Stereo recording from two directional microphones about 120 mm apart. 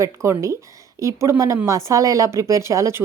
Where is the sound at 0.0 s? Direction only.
25° right (ahead or behind).